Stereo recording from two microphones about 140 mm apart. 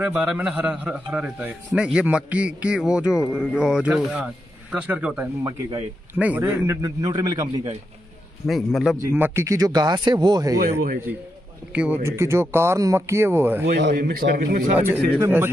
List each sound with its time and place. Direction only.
0.0 s a man's voice: 10° right (ahead or behind); by 7.4 s 30° right (ahead or behind)
8.5 s speech: centre (ahead or behind)
8.9 s speech: 15° right (ahead or behind)
11.7 s a man's voice: 10° right (ahead or behind)
13.7 s a man's voice: 90° right
14.8 s a man's voice: 15° right (ahead or behind)